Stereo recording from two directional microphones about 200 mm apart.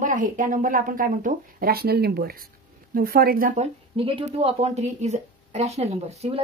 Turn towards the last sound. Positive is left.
turn(degrees=-30)  # may be behind; listen again after turning